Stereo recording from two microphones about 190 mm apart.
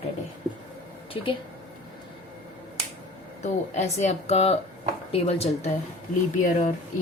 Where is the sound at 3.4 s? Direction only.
40° left (ahead or behind).